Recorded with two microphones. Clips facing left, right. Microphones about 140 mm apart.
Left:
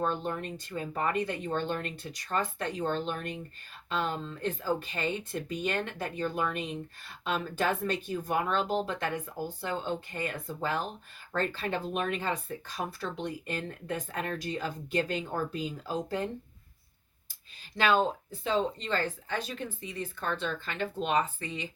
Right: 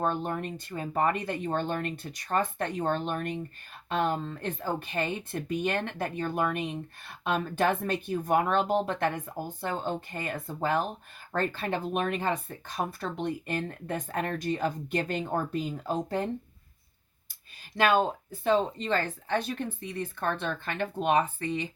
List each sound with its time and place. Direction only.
0.0 s speech: 50° right (ahead or behind)
17.7 s speech: 50° right (ahead or behind)